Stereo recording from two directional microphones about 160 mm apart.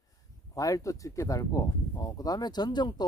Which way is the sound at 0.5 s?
20° left (ahead or behind).